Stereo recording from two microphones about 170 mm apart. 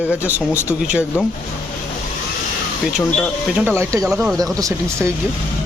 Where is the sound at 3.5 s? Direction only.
10° right (ahead or behind).